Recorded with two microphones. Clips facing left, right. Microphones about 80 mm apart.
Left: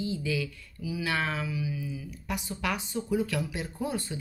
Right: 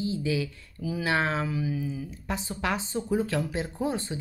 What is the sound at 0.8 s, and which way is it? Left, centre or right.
Speech, right.